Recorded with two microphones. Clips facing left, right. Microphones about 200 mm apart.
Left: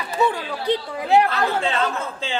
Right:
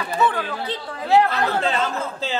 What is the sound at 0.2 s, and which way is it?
Speech, 10° left (ahead or behind).